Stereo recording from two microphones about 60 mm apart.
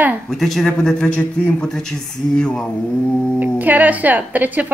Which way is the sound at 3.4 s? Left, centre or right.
Right.